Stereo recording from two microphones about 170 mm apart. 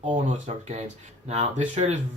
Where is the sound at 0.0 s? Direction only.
45° right (ahead or behind).